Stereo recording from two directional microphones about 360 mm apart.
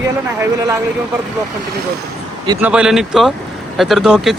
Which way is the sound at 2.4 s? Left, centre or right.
Centre.